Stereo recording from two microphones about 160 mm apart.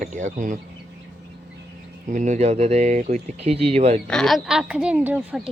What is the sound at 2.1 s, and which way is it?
Speech, 50° right (ahead or behind).